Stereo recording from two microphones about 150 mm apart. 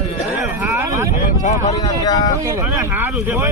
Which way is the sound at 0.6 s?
20° right (ahead or behind).